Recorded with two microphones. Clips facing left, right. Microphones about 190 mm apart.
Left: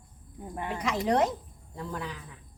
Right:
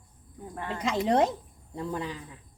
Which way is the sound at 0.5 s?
15° left (ahead or behind).